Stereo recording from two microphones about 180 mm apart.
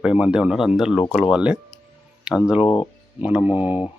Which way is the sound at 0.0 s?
5° right (ahead or behind).